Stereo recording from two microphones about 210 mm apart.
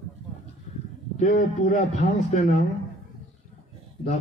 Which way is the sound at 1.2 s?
40° left (ahead or behind).